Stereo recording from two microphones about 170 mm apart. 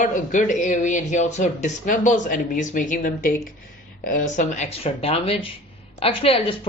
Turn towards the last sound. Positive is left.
turn(degrees=35)  # may be behind; listen again after turning